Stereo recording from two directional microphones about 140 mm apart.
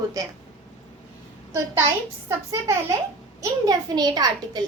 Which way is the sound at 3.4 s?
30° right (ahead or behind).